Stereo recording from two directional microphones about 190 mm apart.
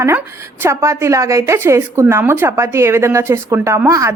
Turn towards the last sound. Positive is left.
turn(degrees=-15)  # may be behind; listen again after turning